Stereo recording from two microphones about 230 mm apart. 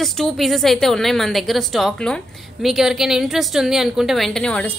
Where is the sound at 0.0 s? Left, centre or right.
Centre.